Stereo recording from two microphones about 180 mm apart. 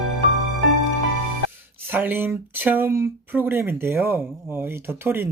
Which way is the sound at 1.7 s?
10° right (ahead or behind).